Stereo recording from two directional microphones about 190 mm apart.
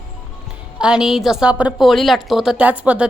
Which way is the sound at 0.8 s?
5° right (ahead or behind).